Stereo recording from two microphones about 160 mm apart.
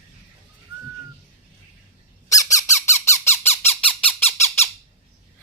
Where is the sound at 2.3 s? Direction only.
20° left (ahead or behind).